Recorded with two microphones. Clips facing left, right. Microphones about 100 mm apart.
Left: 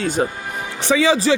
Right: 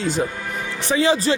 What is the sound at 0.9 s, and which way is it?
Speech, 90° left.